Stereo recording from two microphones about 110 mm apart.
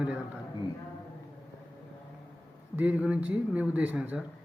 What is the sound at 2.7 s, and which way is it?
A man's voice, 15° right (ahead or behind).